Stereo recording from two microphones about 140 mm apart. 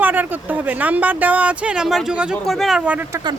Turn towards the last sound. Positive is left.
turn(degrees=-30)  # may be behind; listen again after turning